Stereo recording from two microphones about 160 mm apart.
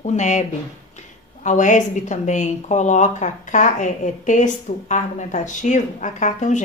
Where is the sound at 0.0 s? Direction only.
45° left (ahead or behind).